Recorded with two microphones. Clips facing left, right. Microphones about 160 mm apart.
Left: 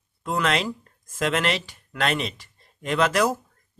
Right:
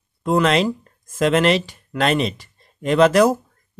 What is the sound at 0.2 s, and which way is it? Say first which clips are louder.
Speech: right 7 dB; 30° right (ahead or behind).